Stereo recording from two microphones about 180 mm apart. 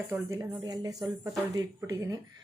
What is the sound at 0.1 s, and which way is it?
Speech, 15° right (ahead or behind).